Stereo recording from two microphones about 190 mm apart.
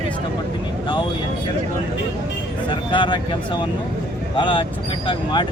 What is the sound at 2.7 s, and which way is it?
Speech, 25° left (ahead or behind).